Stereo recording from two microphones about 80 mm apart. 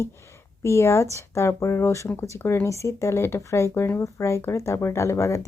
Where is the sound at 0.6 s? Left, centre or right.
Left.